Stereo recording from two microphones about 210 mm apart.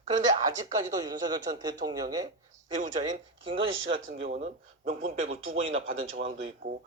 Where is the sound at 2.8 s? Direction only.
35° right (ahead or behind).